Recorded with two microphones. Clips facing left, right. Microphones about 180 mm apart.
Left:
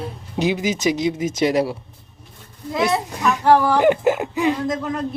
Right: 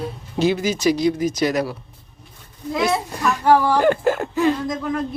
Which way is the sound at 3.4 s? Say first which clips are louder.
Even; 10° right (ahead or behind).